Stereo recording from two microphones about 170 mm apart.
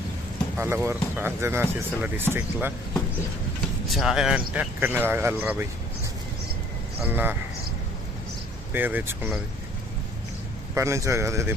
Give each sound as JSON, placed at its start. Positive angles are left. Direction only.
{"t": 0.5, "sound": "speech", "side_deg": -15}
{"t": 3.8, "sound": "speech", "side_deg": 0}
{"t": 7.0, "sound": "speech", "side_deg": -10}
{"t": 8.7, "sound": "speech", "side_deg": -10}
{"t": 10.8, "sound": "speech", "side_deg": -15}